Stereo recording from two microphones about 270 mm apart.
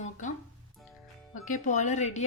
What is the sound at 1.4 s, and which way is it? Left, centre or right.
Speech, left.